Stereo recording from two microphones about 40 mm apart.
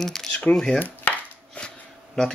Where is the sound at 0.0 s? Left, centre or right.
Centre.